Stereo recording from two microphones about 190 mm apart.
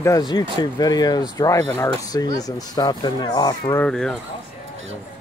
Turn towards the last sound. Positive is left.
turn(degrees=15)  # may be behind; listen again after turning